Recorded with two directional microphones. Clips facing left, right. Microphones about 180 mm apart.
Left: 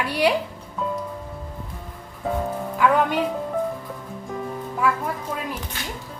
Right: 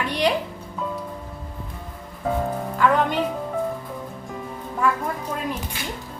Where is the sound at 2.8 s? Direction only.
10° left (ahead or behind).